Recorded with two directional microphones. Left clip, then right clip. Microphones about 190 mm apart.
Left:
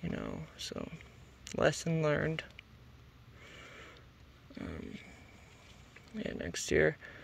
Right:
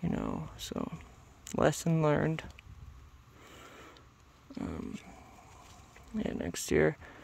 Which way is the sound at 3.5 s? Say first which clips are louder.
Even; 35° right (ahead or behind).